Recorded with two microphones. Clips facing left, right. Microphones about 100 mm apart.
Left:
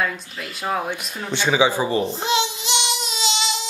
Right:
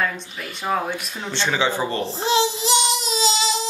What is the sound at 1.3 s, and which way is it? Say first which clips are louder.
Speech: left 4 dB; 10° left (ahead or behind).